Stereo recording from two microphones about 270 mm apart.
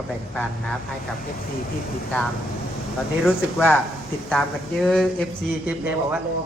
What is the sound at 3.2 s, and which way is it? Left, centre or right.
A man's voice, centre.